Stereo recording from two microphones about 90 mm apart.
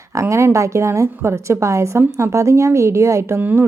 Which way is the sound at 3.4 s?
20° right (ahead or behind).